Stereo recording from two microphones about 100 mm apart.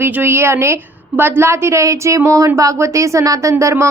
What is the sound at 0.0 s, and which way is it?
A woman's voice, 20° right (ahead or behind).